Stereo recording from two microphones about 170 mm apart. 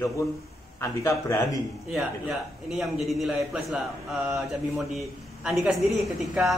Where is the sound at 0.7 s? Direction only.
15° left (ahead or behind).